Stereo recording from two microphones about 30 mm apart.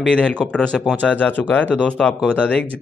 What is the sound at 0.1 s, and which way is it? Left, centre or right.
Speech, left.